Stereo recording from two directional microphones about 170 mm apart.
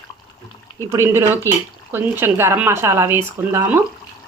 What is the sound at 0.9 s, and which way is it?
Speech, 15° right (ahead or behind).